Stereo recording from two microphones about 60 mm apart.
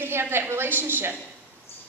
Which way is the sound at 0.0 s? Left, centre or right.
Right.